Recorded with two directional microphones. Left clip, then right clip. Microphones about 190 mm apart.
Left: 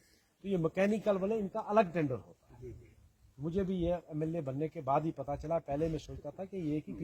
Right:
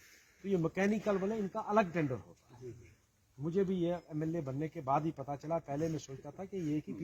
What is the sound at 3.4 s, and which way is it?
A man's voice, 40° left (ahead or behind).